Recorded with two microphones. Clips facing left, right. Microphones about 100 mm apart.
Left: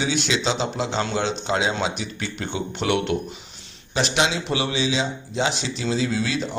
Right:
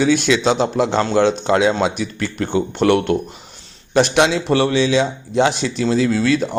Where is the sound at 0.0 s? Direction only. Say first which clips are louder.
Right 8 dB; 55° right (ahead or behind).